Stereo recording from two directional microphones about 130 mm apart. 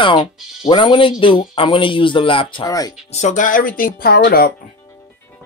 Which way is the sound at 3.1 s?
65° left (ahead or behind).